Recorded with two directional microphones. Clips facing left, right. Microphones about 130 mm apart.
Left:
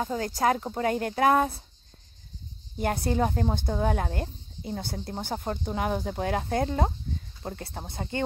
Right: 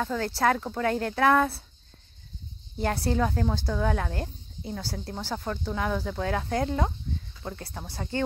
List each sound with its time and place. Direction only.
0.0 s speech: 20° left (ahead or behind)
2.8 s speech: 20° left (ahead or behind)